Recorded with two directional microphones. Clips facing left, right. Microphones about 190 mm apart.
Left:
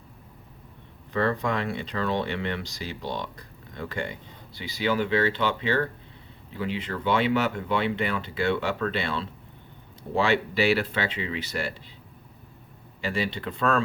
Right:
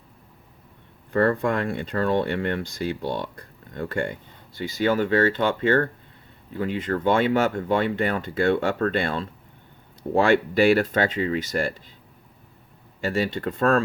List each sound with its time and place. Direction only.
1.1 s speech: 50° right (ahead or behind)
13.0 s speech: 45° right (ahead or behind)